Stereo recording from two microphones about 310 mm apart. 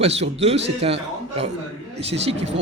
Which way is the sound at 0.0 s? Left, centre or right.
Centre.